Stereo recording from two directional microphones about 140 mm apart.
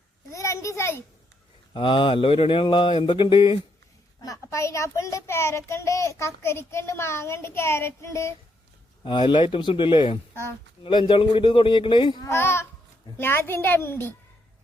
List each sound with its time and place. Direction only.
0.3 s a sound: 20° left (ahead or behind)
1.7 s mantra: 35° left (ahead or behind)
4.2 s a child's voice: 25° left (ahead or behind)
9.0 s mantra: 35° left (ahead or behind)
12.3 s a woman's voice: 20° left (ahead or behind)